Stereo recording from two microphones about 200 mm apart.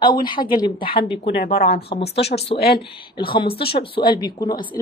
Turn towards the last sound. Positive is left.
turn(degrees=20)  # may be behind; listen again after turning